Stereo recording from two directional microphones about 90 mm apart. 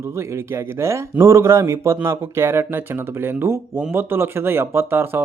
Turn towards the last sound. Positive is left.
turn(degrees=-25)  # may be behind; listen again after turning